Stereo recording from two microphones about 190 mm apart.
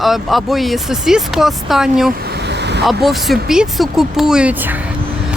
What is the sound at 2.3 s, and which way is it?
Vehicle, 65° right (ahead or behind).